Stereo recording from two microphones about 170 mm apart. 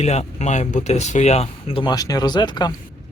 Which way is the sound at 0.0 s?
40° left (ahead or behind).